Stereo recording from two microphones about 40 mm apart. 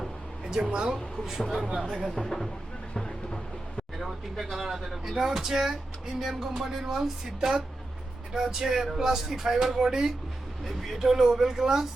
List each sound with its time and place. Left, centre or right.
0.4 s speech: centre
1.4 s speech: centre
2.1 s speech: centre
3.9 s speech: centre
10.6 s speech: centre